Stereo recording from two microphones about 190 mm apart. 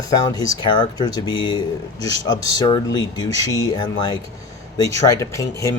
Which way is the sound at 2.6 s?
25° left (ahead or behind).